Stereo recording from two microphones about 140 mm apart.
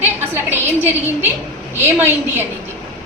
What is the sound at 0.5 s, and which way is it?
A woman's voice, 15° right (ahead or behind).